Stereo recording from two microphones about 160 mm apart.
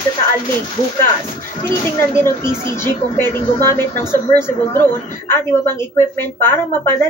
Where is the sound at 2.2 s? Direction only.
15° left (ahead or behind).